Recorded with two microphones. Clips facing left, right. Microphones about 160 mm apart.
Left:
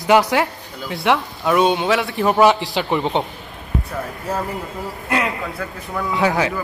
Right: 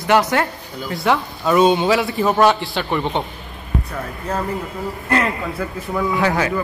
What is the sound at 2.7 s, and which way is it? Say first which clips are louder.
Speech: left 1 dB; 20° left (ahead or behind).